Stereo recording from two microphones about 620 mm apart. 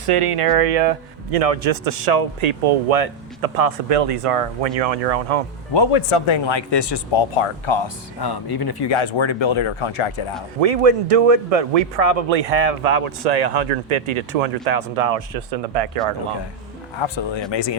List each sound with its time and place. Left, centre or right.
0.0 s a man's voice: right
5.7 s speech: left
9.0 s speech: left
10.6 s a man's voice: right
17.0 s speech: left